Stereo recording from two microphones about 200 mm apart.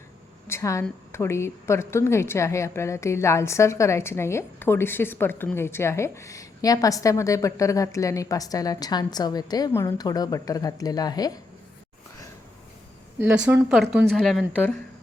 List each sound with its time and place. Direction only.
0.4 s speech: 15° left (ahead or behind)
13.1 s a woman's voice: 5° right (ahead or behind)